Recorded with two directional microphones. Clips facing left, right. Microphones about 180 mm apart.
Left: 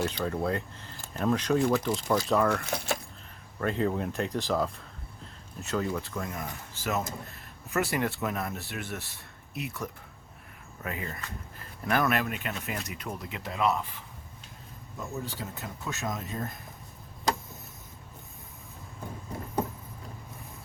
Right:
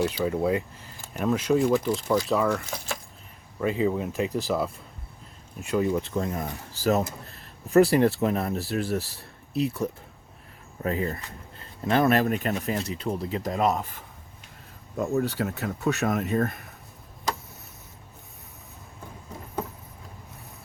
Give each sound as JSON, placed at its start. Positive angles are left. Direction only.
{"t": 0.0, "sound": "speech", "side_deg": -10}
{"t": 2.6, "sound": "speech", "side_deg": 65}
{"t": 3.6, "sound": "speech", "side_deg": -5}
{"t": 14.9, "sound": "speech", "side_deg": -65}